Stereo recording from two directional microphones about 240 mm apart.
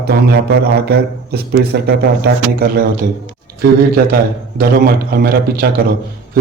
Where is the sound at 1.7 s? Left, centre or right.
Right.